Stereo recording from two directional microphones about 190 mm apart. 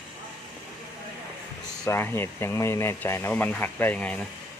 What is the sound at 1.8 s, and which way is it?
Speech, 15° left (ahead or behind).